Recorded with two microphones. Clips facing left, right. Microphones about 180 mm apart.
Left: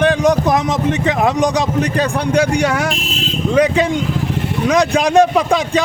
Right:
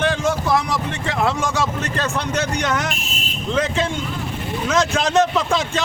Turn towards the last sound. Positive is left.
turn(degrees=15)  # may be behind; listen again after turning